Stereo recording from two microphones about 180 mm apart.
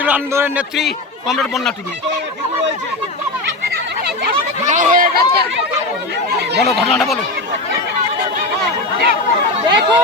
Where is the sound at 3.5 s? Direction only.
65° right (ahead or behind).